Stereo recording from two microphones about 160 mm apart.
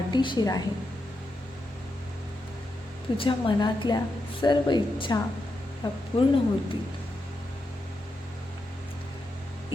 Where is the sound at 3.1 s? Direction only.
35° left (ahead or behind).